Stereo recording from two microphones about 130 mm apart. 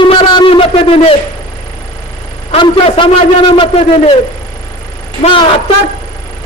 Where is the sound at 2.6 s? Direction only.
40° left (ahead or behind).